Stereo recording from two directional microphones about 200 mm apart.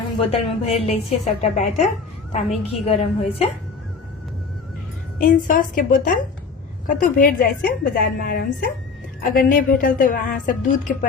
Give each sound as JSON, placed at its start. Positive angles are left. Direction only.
{"t": 0.3, "sound": "a woman's voice", "side_deg": 30}
{"t": 5.2, "sound": "a woman's voice", "side_deg": 40}